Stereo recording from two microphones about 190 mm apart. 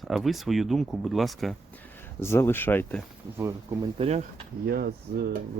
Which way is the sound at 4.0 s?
35° right (ahead or behind).